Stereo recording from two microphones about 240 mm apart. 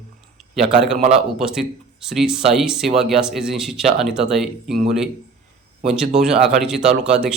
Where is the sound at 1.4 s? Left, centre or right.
Centre.